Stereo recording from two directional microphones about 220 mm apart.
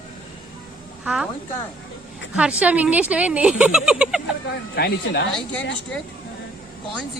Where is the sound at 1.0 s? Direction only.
5° right (ahead or behind).